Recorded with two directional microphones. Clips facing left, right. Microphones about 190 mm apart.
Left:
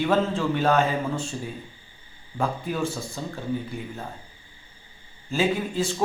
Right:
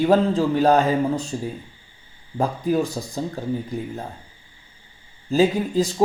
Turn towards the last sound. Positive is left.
turn(degrees=-35)  # may be behind; listen again after turning